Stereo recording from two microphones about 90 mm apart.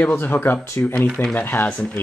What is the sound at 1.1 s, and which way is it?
Speech, 5° left (ahead or behind).